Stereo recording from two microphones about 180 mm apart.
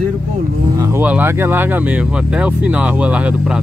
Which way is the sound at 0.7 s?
20° right (ahead or behind).